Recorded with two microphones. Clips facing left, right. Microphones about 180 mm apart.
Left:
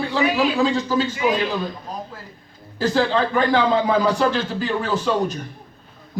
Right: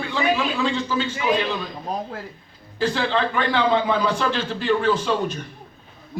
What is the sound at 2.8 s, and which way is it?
A man's voice, 40° left (ahead or behind).